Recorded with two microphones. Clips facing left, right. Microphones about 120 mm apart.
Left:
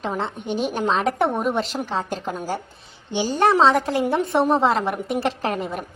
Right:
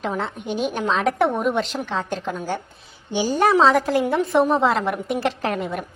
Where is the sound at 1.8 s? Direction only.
40° left (ahead or behind).